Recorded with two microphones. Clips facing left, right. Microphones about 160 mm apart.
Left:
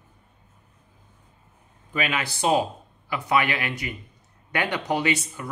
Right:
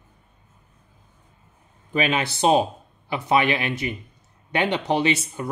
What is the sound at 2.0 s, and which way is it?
Speech, 25° right (ahead or behind).